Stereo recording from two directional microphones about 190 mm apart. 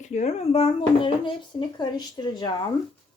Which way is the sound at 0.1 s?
35° left (ahead or behind).